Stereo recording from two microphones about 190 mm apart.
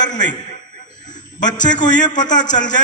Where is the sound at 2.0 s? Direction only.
40° left (ahead or behind).